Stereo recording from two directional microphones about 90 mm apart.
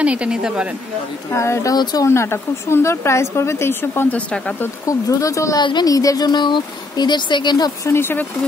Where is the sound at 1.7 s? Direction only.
50° left (ahead or behind).